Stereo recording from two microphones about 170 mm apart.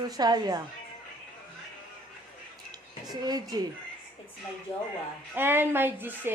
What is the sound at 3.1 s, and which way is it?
Speech, 25° right (ahead or behind).